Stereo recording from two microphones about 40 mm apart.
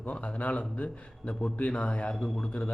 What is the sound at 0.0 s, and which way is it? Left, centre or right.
A man's voice, left.